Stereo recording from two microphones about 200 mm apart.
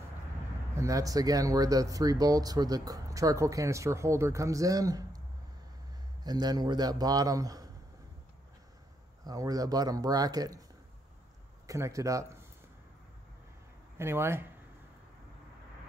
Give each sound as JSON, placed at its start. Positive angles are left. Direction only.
{"t": 0.7, "sound": "speech", "side_deg": -15}
{"t": 6.2, "sound": "a man's voice", "side_deg": -20}
{"t": 9.2, "sound": "a man's voice", "side_deg": -20}
{"t": 11.6, "sound": "speech", "side_deg": -15}
{"t": 13.9, "sound": "speech", "side_deg": -10}